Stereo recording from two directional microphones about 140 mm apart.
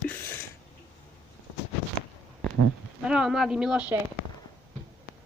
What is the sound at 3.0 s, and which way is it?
Speech, 5° right (ahead or behind).